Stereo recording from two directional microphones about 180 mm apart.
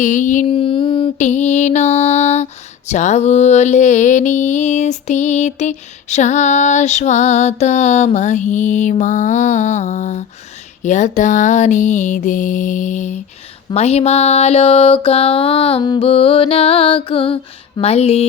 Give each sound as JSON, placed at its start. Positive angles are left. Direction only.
{"t": 0.0, "sound": "music", "side_deg": 45}
{"t": 0.4, "sound": "mantra", "side_deg": 30}
{"t": 10.8, "sound": "music", "side_deg": 45}
{"t": 13.7, "sound": "mantra", "side_deg": 35}